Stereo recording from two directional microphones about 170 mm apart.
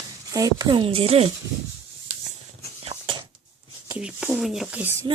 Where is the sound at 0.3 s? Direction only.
20° right (ahead or behind).